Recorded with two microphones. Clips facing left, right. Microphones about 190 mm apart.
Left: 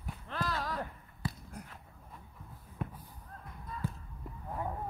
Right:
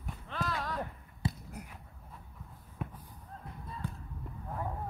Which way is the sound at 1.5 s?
10° right (ahead or behind).